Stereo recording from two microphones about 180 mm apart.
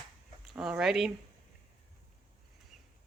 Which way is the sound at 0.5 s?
5° right (ahead or behind).